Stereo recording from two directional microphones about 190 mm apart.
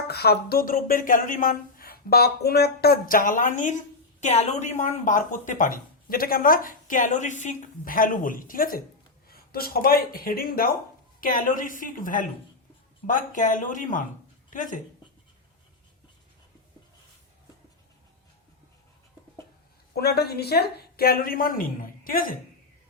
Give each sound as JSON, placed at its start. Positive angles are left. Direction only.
{"t": 0.1, "sound": "speech", "side_deg": 55}
{"t": 19.9, "sound": "speech", "side_deg": 55}